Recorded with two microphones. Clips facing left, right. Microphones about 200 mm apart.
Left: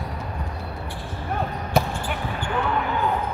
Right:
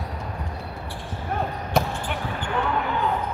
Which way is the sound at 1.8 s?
Centre (ahead or behind).